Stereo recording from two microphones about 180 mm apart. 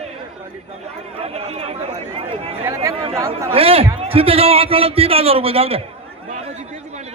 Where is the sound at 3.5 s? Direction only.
35° right (ahead or behind).